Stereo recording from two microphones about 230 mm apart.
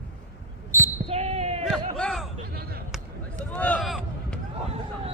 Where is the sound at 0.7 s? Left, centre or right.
Centre.